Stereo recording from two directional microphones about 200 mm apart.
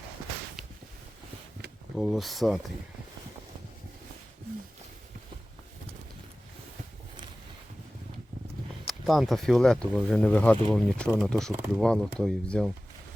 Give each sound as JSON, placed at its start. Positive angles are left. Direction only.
{"t": 2.0, "sound": "speech", "side_deg": 0}
{"t": 8.8, "sound": "speech", "side_deg": 0}